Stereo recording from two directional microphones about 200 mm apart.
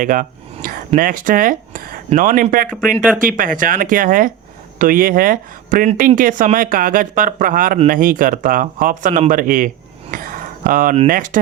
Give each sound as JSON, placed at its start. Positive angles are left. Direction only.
{"t": 0.0, "sound": "speech", "side_deg": -45}
{"t": 2.8, "sound": "speech", "side_deg": -5}
{"t": 3.2, "sound": "speech", "side_deg": -45}
{"t": 10.1, "sound": "a sound", "side_deg": -45}
{"t": 10.9, "sound": "speech", "side_deg": -40}